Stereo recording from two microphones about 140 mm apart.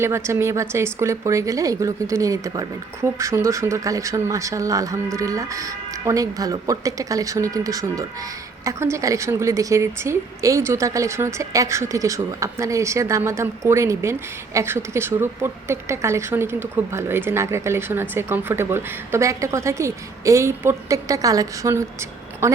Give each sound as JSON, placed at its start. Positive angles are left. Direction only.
{"t": 0.0, "sound": "a woman's voice", "side_deg": -20}